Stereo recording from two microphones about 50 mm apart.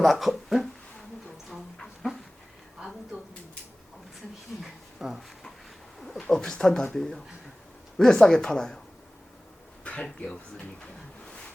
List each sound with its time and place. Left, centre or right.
0.0 s speech: centre
2.7 s a sound: centre
4.6 s a sound: centre
6.0 s bird: centre
7.9 s speech: centre
9.8 s speech: left